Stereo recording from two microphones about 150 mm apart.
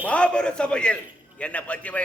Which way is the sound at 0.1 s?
5° left (ahead or behind).